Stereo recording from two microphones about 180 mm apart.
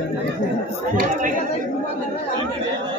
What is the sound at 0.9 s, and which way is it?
Chatter, 50° right (ahead or behind).